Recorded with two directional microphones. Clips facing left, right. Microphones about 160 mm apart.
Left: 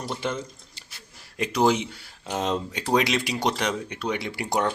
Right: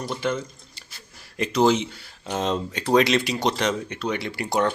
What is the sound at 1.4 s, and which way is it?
Speech, 15° left (ahead or behind).